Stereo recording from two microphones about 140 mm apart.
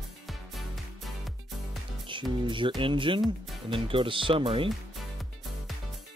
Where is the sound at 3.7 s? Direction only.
40° right (ahead or behind).